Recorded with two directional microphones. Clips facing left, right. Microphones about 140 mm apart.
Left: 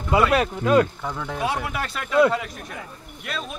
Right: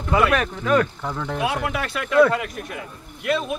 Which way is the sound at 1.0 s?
Centre (ahead or behind).